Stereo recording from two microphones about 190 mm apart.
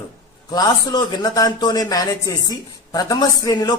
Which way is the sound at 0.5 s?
20° left (ahead or behind).